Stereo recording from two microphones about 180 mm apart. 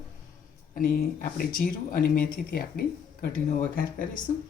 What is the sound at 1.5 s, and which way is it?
Speech, 50° left (ahead or behind).